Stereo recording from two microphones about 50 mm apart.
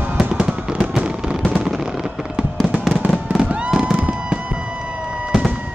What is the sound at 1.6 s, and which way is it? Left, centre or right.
Gunshot, centre.